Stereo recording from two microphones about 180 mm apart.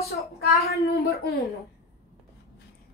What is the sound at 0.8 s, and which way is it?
Speech, 60° left (ahead or behind).